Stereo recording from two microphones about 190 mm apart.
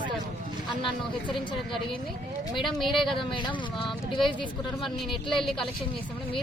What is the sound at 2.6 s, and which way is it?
Speech, centre (ahead or behind).